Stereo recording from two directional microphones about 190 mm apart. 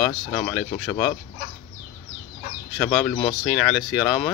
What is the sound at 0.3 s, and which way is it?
Speech, 5° left (ahead or behind).